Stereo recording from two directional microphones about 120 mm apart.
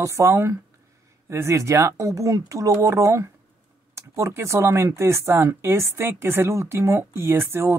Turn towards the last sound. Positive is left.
turn(degrees=-20)  # may be behind; listen again after turning